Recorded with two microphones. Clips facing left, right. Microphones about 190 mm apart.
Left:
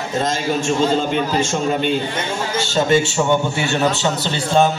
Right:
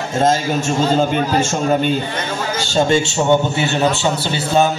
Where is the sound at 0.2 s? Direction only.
45° right (ahead or behind).